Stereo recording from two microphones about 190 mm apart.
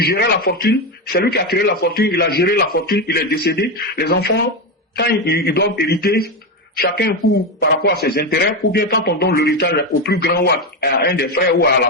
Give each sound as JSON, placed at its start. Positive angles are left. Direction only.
{"t": 0.0, "sound": "speech", "side_deg": 55}